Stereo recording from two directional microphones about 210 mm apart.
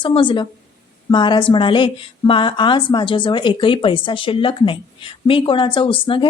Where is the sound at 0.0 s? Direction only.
25° left (ahead or behind).